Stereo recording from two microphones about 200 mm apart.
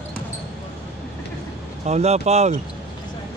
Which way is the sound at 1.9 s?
30° right (ahead or behind).